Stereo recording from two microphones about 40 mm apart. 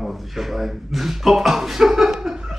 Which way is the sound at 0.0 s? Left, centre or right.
Centre.